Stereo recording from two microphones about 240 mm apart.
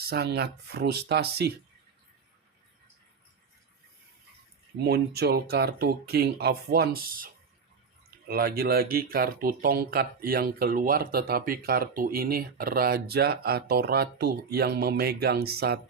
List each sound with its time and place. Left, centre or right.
0.0 s speech: right
4.8 s speech: right
8.3 s speech: right